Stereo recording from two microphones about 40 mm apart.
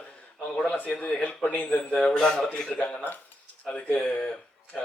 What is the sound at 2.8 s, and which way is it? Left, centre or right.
Speech, left.